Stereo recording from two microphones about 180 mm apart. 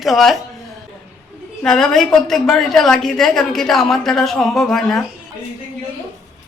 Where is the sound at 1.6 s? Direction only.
Centre (ahead or behind).